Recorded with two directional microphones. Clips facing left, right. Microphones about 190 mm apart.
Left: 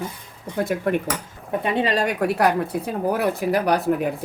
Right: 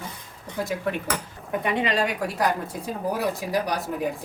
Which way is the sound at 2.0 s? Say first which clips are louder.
Left 5 dB; 60° left (ahead or behind).